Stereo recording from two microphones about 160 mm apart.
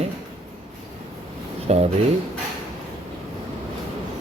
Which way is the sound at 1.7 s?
40° right (ahead or behind).